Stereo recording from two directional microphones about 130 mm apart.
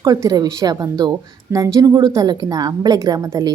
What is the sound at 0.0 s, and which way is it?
A woman's voice, 30° right (ahead or behind).